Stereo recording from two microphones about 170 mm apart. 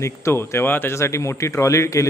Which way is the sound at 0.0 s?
15° left (ahead or behind).